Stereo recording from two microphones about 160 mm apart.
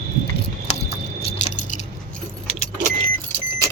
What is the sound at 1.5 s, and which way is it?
Keys jangling, 50° left (ahead or behind).